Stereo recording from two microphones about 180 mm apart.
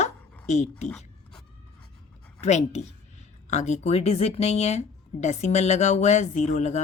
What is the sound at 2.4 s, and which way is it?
Speech, 40° left (ahead or behind).